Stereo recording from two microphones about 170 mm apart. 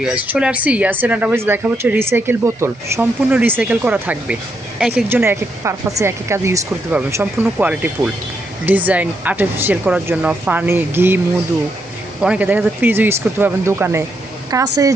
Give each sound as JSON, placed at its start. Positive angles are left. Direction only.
{"t": 0.0, "sound": "speech", "side_deg": -5}
{"t": 12.2, "sound": "speech", "side_deg": -10}